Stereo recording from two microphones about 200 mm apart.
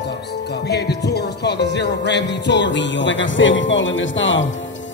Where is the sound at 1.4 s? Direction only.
60° left (ahead or behind).